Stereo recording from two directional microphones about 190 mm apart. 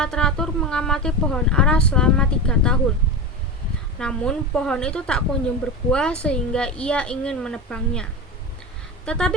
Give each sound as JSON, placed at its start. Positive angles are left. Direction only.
{"t": 0.0, "sound": "speech", "side_deg": 5}
{"t": 3.9, "sound": "speech", "side_deg": 5}
{"t": 9.0, "sound": "speech", "side_deg": 5}